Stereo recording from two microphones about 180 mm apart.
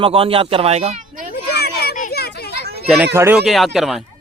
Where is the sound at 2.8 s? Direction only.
Centre (ahead or behind).